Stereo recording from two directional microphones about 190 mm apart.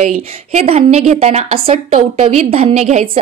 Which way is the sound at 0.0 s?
35° right (ahead or behind).